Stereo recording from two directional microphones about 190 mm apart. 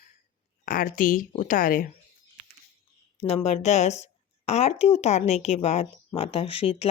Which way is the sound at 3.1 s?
30° left (ahead or behind).